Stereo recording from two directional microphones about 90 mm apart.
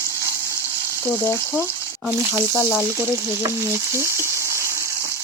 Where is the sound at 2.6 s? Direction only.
5° right (ahead or behind).